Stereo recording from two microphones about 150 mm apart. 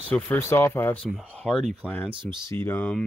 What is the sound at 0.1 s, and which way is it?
Speech, 15° left (ahead or behind).